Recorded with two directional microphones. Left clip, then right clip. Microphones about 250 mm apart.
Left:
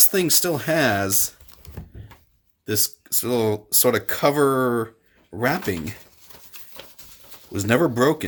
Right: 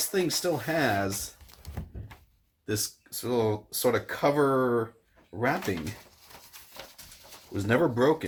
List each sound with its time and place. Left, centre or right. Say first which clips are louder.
0.0 s speech: left 7 dB; left
2.6 s speech: left 7 dB; left
7.5 s speech: left 5 dB; left